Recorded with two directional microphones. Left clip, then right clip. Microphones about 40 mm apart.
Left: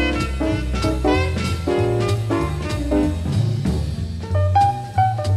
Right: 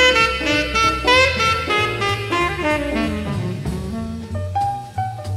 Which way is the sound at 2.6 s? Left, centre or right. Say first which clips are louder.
Right 2 dB; left.